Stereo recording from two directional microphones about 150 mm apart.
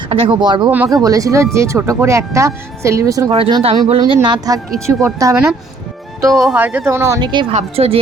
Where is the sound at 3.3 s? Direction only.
35° right (ahead or behind).